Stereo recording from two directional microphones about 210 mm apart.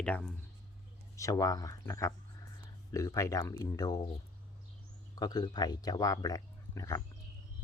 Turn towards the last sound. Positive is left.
turn(degrees=15)  # may be behind; listen again after turning